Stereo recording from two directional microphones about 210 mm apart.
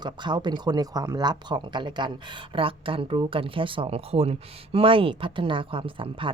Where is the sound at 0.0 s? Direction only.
20° right (ahead or behind).